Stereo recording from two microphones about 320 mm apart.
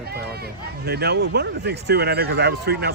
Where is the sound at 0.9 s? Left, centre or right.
Right.